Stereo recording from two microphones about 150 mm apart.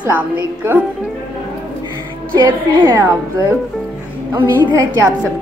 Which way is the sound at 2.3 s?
30° right (ahead or behind).